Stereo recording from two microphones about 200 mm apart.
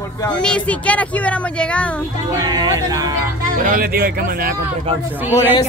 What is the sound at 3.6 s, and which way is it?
Speech, 45° right (ahead or behind).